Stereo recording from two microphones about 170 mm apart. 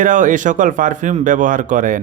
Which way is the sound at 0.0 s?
50° right (ahead or behind).